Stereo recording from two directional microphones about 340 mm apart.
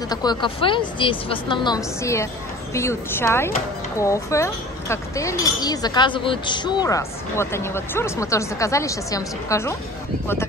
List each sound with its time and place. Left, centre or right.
0.1 s speech: centre